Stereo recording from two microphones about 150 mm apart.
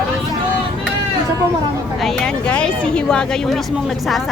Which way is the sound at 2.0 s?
Centre (ahead or behind).